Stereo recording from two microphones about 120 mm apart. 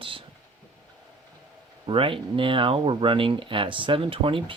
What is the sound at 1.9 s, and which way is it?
Speech, 45° right (ahead or behind).